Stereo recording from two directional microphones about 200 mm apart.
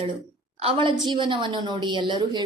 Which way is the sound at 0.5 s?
25° right (ahead or behind).